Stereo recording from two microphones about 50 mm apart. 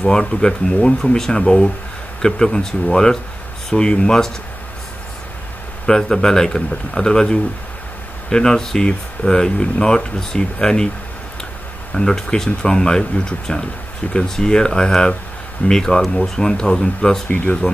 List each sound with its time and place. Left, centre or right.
0.0 s speech: centre
5.9 s speech: centre
11.9 s speech: centre
17.3 s speech: left